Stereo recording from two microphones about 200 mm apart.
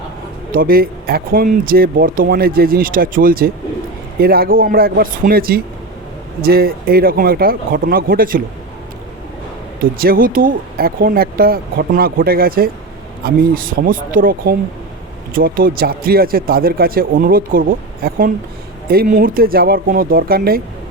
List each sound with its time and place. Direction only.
0.5 s speech: 50° right (ahead or behind)
10.0 s speech: 45° right (ahead or behind)